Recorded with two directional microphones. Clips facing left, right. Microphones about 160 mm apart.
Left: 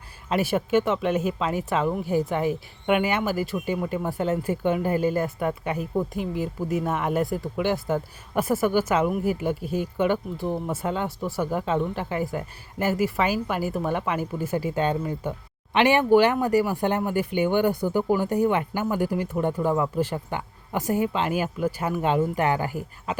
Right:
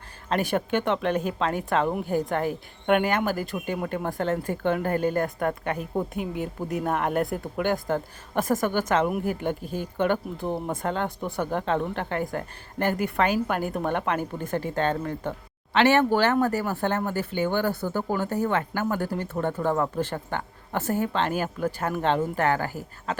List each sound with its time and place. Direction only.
0.3 s speech: 5° left (ahead or behind)